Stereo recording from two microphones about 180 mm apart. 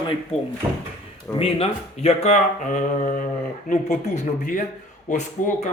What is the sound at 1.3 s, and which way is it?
Speech, 30° left (ahead or behind).